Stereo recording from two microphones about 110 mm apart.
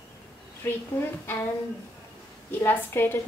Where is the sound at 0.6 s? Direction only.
25° left (ahead or behind).